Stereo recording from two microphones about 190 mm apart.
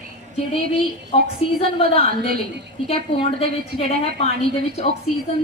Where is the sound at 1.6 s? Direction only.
30° left (ahead or behind).